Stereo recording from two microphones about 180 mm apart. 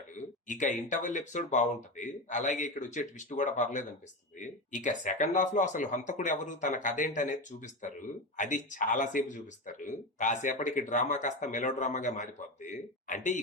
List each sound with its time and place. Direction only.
0.2 s speech: 45° left (ahead or behind)